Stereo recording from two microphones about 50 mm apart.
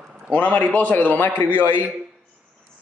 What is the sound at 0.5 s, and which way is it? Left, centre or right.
Speech, left.